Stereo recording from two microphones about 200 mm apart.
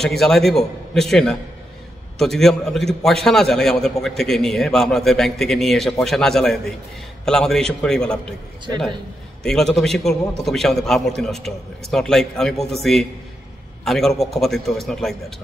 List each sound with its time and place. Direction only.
0.2 s a man's voice: centre (ahead or behind)
9.4 s a man's voice: centre (ahead or behind)